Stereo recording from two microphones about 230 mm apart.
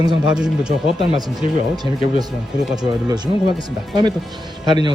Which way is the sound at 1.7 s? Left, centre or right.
Centre.